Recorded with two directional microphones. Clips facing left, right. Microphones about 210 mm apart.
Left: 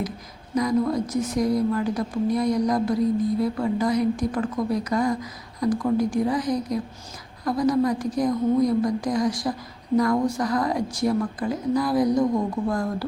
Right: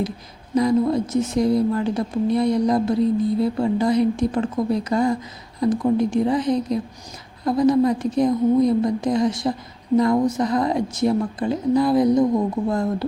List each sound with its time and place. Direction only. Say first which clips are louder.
0.5 s a woman's voice: right 4 dB; 30° right (ahead or behind)